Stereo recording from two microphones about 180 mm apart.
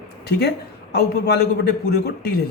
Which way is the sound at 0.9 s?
60° left (ahead or behind).